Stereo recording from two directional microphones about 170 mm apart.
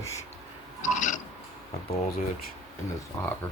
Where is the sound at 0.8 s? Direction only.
50° left (ahead or behind).